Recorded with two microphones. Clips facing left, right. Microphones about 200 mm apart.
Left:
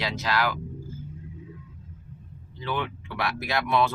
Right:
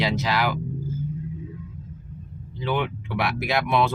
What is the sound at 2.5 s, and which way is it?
Speech, 20° right (ahead or behind).